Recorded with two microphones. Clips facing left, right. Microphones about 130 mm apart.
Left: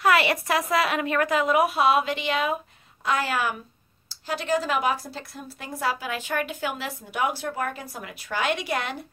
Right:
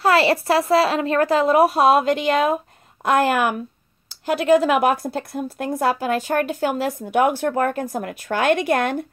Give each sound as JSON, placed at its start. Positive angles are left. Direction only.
{"t": 0.0, "sound": "a woman's voice", "side_deg": -30}